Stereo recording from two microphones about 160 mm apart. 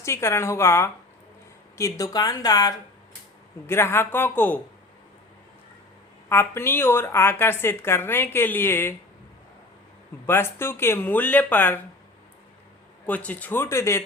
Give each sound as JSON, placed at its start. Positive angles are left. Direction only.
{"t": 0.0, "sound": "a woman's voice", "side_deg": 15}
{"t": 6.2, "sound": "a woman's voice", "side_deg": 15}
{"t": 10.2, "sound": "a woman's voice", "side_deg": 15}
{"t": 13.1, "sound": "a woman's voice", "side_deg": 10}